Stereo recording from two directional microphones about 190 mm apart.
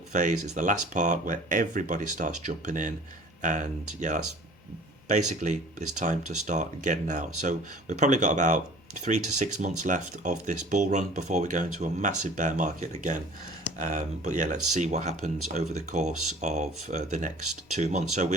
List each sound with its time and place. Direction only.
0.1 s speech: 40° right (ahead or behind)